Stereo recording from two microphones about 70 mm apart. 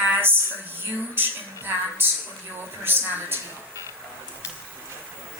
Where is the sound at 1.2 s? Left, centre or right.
Right.